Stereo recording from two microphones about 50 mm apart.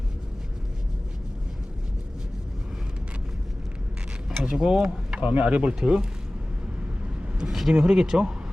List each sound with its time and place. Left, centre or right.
4.3 s speech: centre
5.2 s speech: right
7.3 s speech: centre